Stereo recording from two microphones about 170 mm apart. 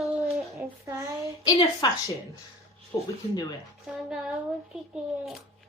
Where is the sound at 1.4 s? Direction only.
20° left (ahead or behind).